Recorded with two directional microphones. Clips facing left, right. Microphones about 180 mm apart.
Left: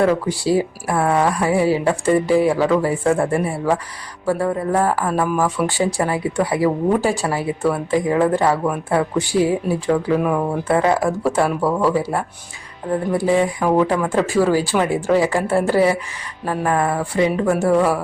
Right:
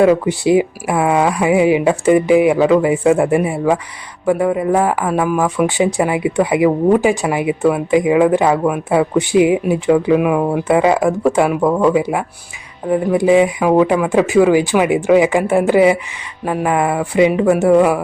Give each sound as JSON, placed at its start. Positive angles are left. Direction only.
{"t": 0.0, "sound": "speech", "side_deg": -15}